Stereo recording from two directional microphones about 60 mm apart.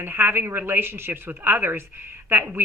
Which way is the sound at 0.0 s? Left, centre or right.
Right.